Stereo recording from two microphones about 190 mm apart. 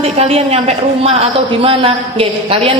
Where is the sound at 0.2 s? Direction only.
30° right (ahead or behind).